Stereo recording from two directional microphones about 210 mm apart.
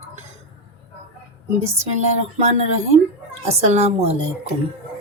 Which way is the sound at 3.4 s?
30° right (ahead or behind).